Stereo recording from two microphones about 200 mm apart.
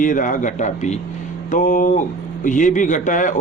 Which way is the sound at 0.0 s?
40° left (ahead or behind).